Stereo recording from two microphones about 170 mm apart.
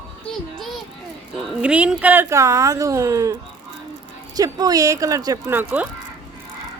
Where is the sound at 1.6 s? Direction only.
5° right (ahead or behind).